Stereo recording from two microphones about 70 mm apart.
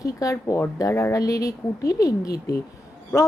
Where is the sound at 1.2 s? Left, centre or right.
Left.